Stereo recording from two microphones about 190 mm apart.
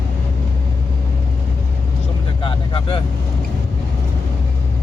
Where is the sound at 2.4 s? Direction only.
25° left (ahead or behind).